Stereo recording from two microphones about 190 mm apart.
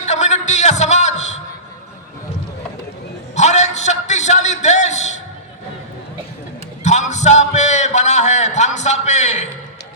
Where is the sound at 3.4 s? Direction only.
35° left (ahead or behind).